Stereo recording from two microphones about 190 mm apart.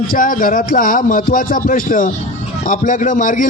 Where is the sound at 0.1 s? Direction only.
45° left (ahead or behind).